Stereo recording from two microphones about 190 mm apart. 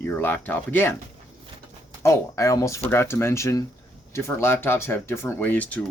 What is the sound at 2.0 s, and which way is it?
Speech, 15° left (ahead or behind).